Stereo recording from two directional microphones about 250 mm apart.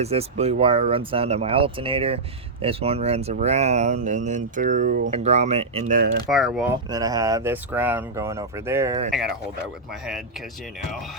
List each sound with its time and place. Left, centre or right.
0.0 s speech: right
6.3 s speech: centre
6.9 s speech: centre